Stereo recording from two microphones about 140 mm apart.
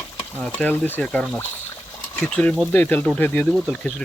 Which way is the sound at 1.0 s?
Centre (ahead or behind).